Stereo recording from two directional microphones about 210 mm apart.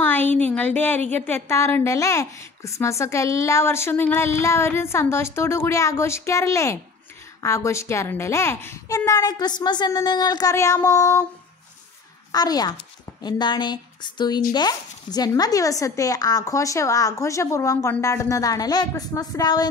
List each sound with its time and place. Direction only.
0.0 s a woman's voice: 10° left (ahead or behind)
12.3 s a woman's voice: 20° left (ahead or behind)